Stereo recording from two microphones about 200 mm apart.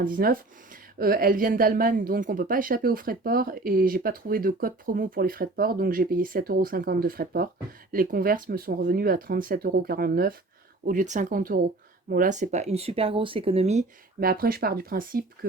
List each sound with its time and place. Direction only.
0.0 s speech: 45° right (ahead or behind)
14.2 s speech: 50° right (ahead or behind)